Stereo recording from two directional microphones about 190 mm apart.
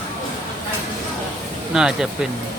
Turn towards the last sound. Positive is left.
turn(degrees=-5)  # may be behind; listen again after turning